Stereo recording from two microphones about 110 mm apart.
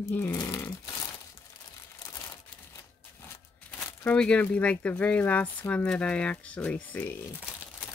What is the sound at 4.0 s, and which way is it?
Speech, 10° left (ahead or behind).